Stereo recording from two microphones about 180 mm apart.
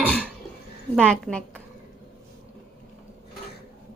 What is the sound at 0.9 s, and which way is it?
Speech, centre (ahead or behind).